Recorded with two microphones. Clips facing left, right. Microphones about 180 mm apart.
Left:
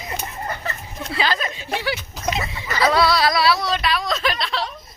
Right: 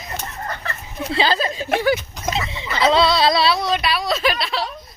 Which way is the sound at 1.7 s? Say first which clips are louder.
Right 7 dB; 50° right (ahead or behind).